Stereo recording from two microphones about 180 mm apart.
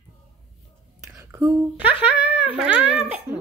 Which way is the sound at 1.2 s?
15° right (ahead or behind).